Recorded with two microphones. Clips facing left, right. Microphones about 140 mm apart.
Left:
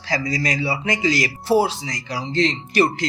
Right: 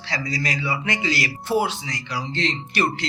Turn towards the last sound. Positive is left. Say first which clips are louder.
# left 5 dB
turn(degrees=40)  # may be behind; listen again after turning